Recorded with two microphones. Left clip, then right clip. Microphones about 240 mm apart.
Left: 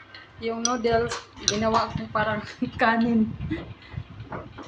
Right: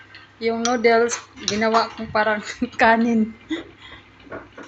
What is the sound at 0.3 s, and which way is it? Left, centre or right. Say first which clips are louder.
Speech: right 6 dB; right.